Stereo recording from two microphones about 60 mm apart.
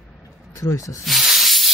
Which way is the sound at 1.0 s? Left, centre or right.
Centre.